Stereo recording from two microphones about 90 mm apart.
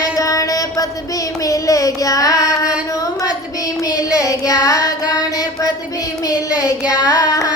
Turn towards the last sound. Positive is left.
turn(degrees=45)  # may be behind; listen again after turning